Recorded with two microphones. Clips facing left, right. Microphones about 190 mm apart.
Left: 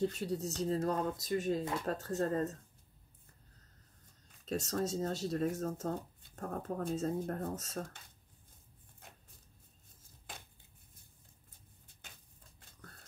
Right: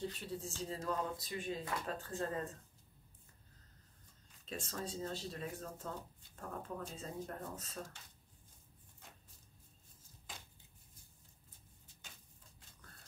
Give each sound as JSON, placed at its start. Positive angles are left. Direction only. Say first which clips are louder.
{"t": 0.0, "sound": "speech", "louder": "left 8 dB", "side_deg": 45}
{"t": 4.5, "sound": "speech", "louder": "left 9 dB", "side_deg": 40}
{"t": 11.9, "sound": "a sound", "louder": "right 1 dB", "side_deg": 55}